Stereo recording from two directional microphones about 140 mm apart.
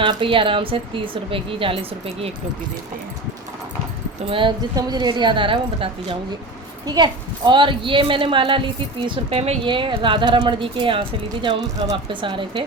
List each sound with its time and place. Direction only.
0.0 s speech: 40° right (ahead or behind)
4.3 s speech: 35° right (ahead or behind)